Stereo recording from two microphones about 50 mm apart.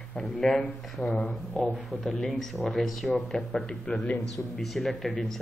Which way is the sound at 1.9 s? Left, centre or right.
Centre.